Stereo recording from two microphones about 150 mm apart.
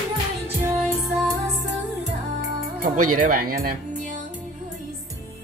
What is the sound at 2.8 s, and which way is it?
Speech, 65° right (ahead or behind).